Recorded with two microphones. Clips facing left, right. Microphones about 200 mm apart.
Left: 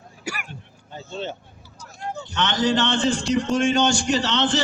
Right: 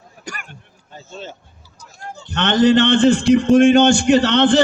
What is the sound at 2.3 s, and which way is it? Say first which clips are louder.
A man's voice: right 8 dB; 55° right (ahead or behind).